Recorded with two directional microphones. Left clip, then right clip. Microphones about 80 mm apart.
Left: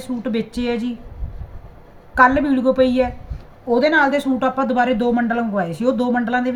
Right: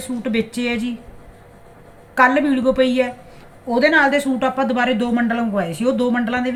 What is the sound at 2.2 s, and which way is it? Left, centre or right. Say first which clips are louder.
Speech: left 1 dB; left.